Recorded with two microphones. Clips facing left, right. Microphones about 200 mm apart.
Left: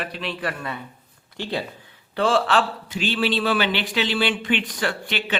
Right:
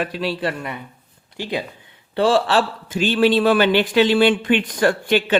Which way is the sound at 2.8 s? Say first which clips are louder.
Right 7 dB; 45° right (ahead or behind).